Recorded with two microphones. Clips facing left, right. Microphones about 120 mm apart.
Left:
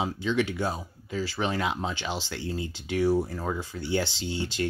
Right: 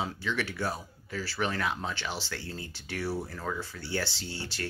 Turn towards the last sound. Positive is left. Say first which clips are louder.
# left 8 dB
turn(degrees=15)  # may be behind; listen again after turning